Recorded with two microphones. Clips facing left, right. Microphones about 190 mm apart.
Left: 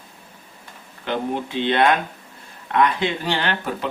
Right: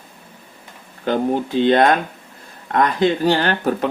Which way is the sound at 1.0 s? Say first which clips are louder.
Right 6 dB; 40° right (ahead or behind).